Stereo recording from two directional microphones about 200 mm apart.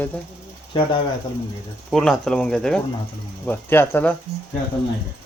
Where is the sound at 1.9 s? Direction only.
Centre (ahead or behind).